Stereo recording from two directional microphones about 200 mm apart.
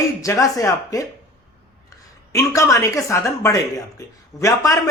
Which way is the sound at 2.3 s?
15° left (ahead or behind).